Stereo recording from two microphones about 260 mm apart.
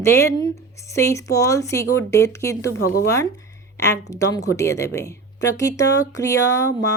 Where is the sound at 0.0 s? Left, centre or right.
Centre.